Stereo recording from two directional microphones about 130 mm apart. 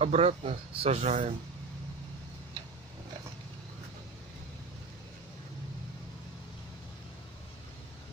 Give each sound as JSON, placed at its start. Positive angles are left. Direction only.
{"t": 0.0, "sound": "speech", "side_deg": -50}